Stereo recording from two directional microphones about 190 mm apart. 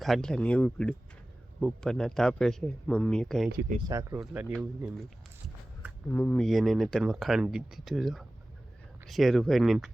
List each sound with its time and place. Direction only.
0.0 s speech: centre (ahead or behind)
3.8 s speech: 15° right (ahead or behind)
6.1 s speech: 5° left (ahead or behind)